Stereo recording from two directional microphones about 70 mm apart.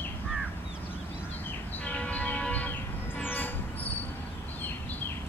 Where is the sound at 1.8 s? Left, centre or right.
Left.